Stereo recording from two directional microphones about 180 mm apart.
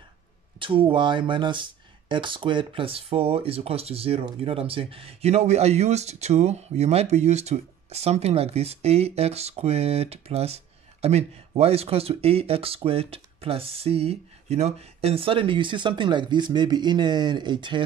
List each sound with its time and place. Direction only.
0.6 s speech: 30° right (ahead or behind)